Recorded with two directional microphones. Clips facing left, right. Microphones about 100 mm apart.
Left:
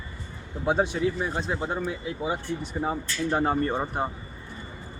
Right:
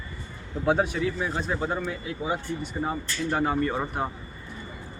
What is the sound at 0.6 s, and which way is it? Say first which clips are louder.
Speech: right 1 dB; 20° left (ahead or behind).